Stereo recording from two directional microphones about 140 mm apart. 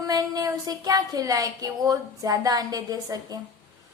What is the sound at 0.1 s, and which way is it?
A woman's voice, 25° right (ahead or behind).